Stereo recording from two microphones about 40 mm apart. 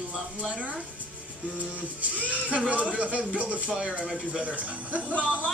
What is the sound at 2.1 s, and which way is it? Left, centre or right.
Speech, right.